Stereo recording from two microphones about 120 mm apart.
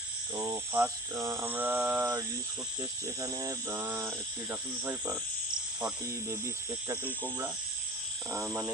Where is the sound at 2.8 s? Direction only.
30° right (ahead or behind).